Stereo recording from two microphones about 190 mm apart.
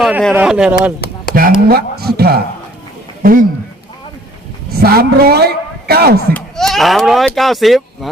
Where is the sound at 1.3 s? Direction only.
50° right (ahead or behind).